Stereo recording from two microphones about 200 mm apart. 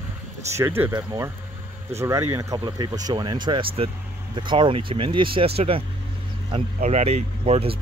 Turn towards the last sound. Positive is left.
turn(degrees=-30)  # may be behind; listen again after turning